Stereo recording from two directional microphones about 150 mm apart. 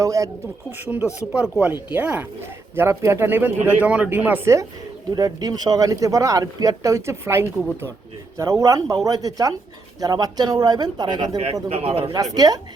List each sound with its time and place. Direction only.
0.0 s speech: 20° right (ahead or behind)
0.7 s speech: 10° right (ahead or behind); by 11.3 s 25° right (ahead or behind)
11.7 s speech: 45° right (ahead or behind)
12.1 s speech: 25° right (ahead or behind)